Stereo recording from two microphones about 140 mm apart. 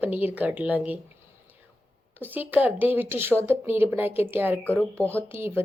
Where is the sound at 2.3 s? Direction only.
15° right (ahead or behind).